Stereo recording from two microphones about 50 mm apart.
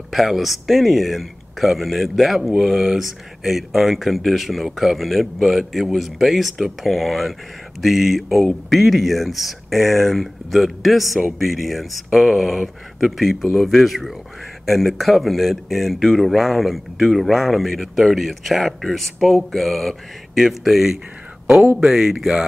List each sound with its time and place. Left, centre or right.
0.1 s a man's voice: centre
20.3 s speech: centre